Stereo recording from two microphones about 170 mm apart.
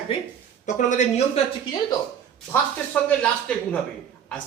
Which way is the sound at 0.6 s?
45° left (ahead or behind).